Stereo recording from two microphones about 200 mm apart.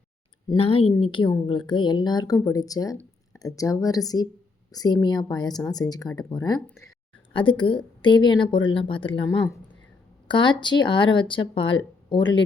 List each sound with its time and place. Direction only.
0.4 s speech: 30° left (ahead or behind)